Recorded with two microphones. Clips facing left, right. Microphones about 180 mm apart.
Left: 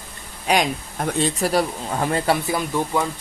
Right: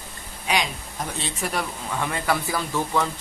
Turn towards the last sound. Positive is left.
turn(degrees=15)  # may be behind; listen again after turning